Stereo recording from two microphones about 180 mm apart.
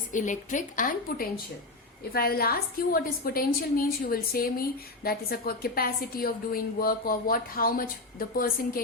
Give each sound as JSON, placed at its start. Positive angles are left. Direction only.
{"t": 0.1, "sound": "a woman's voice", "side_deg": 45}